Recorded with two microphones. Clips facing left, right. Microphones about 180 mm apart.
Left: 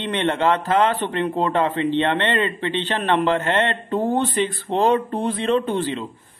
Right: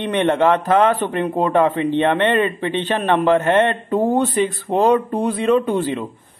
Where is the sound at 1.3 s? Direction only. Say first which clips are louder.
Right 6 dB; 15° right (ahead or behind).